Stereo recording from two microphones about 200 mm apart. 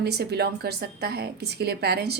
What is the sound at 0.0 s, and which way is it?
A woman's voice, 55° right (ahead or behind).